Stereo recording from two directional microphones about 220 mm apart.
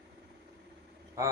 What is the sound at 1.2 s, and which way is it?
Speech, 15° right (ahead or behind).